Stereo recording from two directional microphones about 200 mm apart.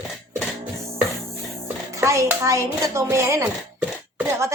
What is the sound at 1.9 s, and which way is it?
Speech, 15° right (ahead or behind).